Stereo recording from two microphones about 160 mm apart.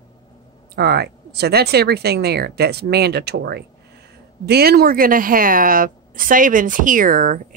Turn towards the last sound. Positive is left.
turn(degrees=-60)  # may be behind; listen again after turning